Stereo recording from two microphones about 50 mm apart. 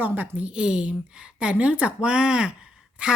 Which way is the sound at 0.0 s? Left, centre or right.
Right.